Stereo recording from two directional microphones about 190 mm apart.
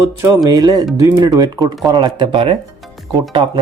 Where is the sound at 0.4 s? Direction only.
20° right (ahead or behind).